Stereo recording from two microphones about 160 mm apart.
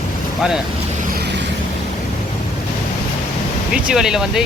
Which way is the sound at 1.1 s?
90° right.